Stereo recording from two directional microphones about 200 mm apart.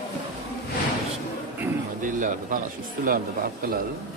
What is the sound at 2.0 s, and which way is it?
Speech, 40° right (ahead or behind).